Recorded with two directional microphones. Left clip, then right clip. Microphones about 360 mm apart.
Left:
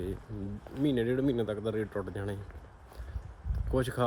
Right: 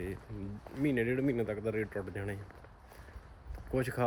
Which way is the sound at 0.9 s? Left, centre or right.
Centre.